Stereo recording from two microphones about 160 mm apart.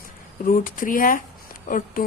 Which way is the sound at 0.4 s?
60° left (ahead or behind).